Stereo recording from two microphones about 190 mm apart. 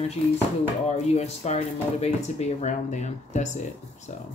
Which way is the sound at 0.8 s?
35° left (ahead or behind).